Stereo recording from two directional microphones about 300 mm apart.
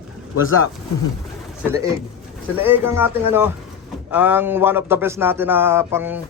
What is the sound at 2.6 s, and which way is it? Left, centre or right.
Speech, centre.